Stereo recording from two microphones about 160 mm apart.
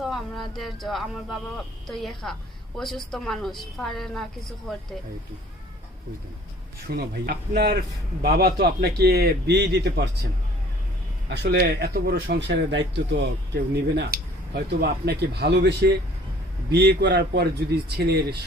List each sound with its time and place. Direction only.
0.0 s a woman's voice: centre (ahead or behind)
6.8 s a man's voice: 75° right (ahead or behind); by 10.1 s 90° right
11.3 s speech: 90° right